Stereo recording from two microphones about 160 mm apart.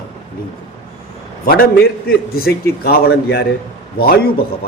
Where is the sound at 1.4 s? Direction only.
70° left (ahead or behind).